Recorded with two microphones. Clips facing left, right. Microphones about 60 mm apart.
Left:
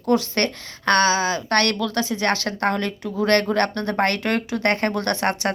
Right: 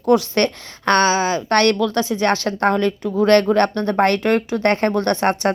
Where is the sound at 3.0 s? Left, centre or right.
Right.